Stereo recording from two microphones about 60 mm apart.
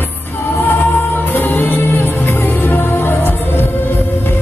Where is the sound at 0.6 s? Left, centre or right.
Left.